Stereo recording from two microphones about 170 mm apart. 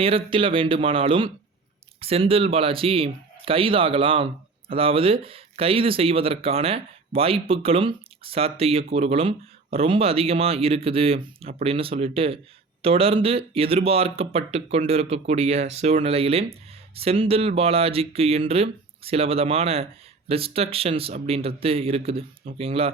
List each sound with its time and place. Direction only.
0.0 s speech: 30° right (ahead or behind)